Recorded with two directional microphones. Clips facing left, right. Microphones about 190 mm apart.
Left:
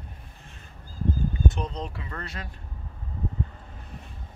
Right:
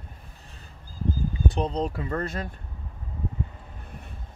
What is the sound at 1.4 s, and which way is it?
Speech, 35° right (ahead or behind).